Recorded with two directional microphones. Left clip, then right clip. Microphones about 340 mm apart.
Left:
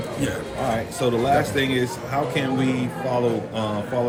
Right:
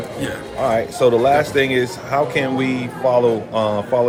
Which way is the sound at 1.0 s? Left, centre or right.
Centre.